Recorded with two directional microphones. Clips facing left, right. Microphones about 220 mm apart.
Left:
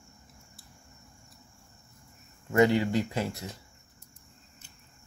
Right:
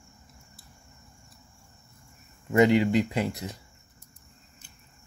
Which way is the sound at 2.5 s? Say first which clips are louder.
Right 3 dB; 15° right (ahead or behind).